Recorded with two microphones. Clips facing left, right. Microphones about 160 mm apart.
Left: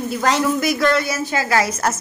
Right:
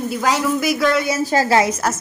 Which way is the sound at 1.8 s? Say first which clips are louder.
Even; 5° right (ahead or behind).